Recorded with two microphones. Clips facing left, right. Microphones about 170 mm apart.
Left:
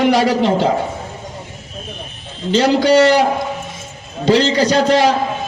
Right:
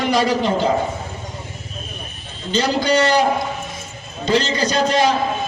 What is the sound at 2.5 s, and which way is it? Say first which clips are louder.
Speech: left 6 dB; 75° left (ahead or behind).